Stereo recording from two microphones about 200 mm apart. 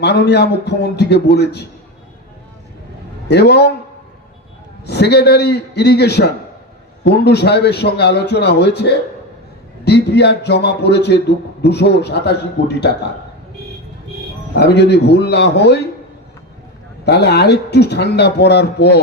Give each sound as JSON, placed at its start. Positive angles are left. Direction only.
{"t": 0.0, "sound": "a man's voice", "side_deg": 55}
{"t": 3.2, "sound": "a man's voice", "side_deg": 55}
{"t": 4.9, "sound": "a man's voice", "side_deg": 55}
{"t": 14.5, "sound": "a man's voice", "side_deg": 55}
{"t": 17.1, "sound": "a man's voice", "side_deg": 55}